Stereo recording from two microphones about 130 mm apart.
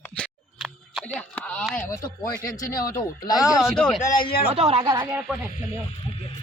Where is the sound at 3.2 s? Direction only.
30° left (ahead or behind).